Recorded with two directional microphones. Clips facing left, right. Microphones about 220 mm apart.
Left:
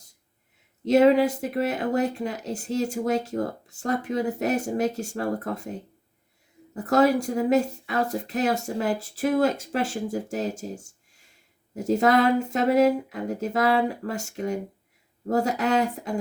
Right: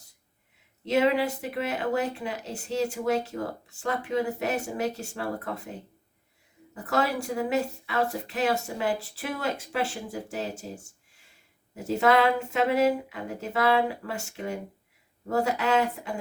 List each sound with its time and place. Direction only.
0.9 s speech: 40° left (ahead or behind)
6.8 s speech: 40° left (ahead or behind)